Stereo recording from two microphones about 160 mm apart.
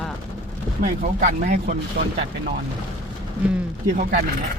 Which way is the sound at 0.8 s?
50° right (ahead or behind).